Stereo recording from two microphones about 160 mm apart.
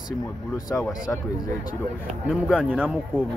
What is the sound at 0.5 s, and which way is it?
Speech, 15° left (ahead or behind).